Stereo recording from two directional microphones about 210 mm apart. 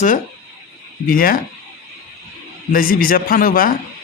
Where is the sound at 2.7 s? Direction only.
40° left (ahead or behind).